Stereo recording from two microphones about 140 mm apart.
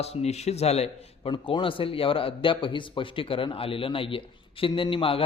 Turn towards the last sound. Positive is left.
turn(degrees=40)  # may be behind; listen again after turning